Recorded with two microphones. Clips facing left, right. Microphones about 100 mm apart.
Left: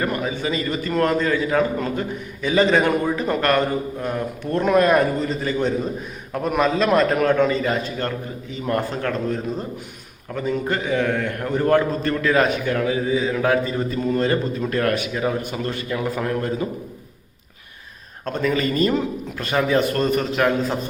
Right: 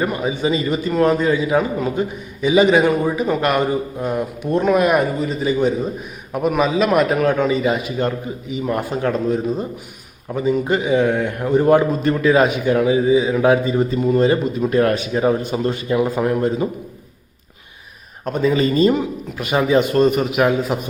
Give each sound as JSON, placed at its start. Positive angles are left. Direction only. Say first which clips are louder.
{"t": 0.0, "sound": "a man's voice", "louder": "right 4 dB", "side_deg": -15}
{"t": 3.4, "sound": "a man's voice", "louder": "right 2 dB", "side_deg": -15}
{"t": 18.3, "sound": "a man's voice", "louder": "right 4 dB", "side_deg": -15}